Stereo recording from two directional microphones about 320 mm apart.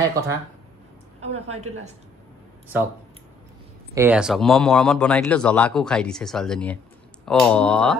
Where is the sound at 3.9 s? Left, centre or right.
Centre.